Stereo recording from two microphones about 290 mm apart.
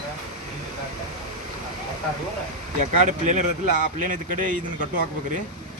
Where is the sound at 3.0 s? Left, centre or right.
Right.